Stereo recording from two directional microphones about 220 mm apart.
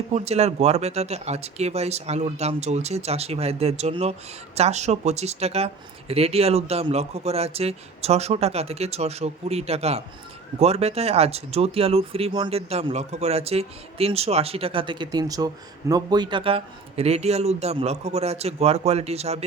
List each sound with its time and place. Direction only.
0.1 s speech: 30° right (ahead or behind)